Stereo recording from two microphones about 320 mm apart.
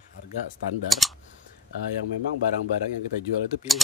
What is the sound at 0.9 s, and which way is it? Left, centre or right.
Speech, centre.